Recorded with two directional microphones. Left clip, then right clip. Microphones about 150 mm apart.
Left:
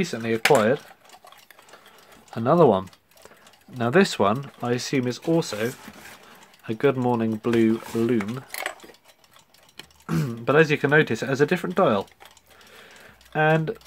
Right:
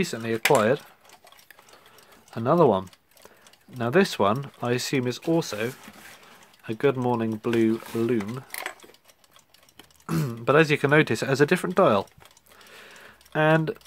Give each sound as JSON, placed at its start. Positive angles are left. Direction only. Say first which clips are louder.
{"t": 0.0, "sound": "speech", "louder": "left 2 dB", "side_deg": -35}
{"t": 2.3, "sound": "speech", "louder": "left 2 dB", "side_deg": -25}
{"t": 4.4, "sound": "speech", "louder": "even", "side_deg": -40}
{"t": 10.0, "sound": "speech", "louder": "even", "side_deg": -40}
{"t": 12.7, "sound": "a sound", "louder": "right 1 dB", "side_deg": -50}